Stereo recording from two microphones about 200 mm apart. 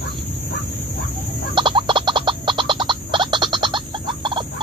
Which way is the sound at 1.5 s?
25° right (ahead or behind).